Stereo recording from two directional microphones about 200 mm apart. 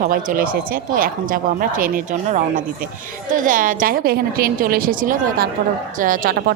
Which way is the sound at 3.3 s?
40° right (ahead or behind).